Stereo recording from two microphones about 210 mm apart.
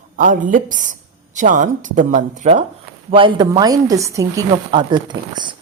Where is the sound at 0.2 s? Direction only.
40° right (ahead or behind).